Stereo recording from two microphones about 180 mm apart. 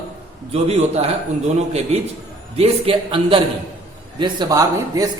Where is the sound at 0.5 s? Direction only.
35° right (ahead or behind).